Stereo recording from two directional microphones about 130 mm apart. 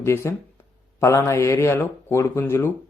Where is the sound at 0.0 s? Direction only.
20° left (ahead or behind).